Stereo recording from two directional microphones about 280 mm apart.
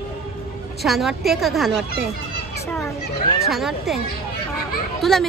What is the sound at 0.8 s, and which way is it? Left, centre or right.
Speech, centre.